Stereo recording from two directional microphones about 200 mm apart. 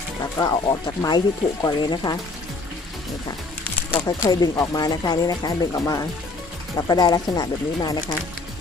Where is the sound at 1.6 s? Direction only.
20° left (ahead or behind).